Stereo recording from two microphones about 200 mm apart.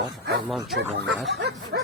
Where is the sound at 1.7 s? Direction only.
60° right (ahead or behind).